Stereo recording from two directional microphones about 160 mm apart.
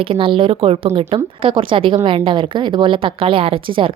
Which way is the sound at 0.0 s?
35° right (ahead or behind).